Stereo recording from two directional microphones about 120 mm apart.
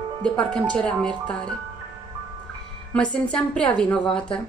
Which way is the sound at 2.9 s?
10° left (ahead or behind).